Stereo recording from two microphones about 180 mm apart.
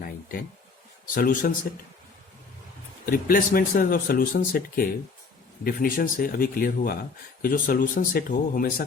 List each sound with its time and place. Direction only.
0.0 s speech: 55° left (ahead or behind)
3.1 s speech: 55° left (ahead or behind)